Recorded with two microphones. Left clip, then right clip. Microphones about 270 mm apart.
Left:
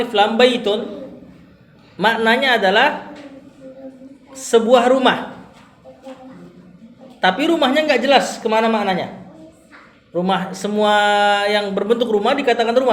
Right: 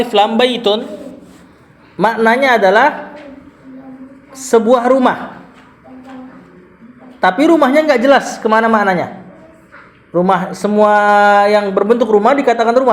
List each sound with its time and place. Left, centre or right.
0.0 s speech: right
2.0 s speech: right
4.3 s speech: right
7.2 s speech: right
10.1 s a man's voice: right
10.8 s speech: right